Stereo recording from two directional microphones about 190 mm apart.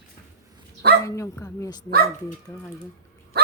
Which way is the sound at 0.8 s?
60° right (ahead or behind).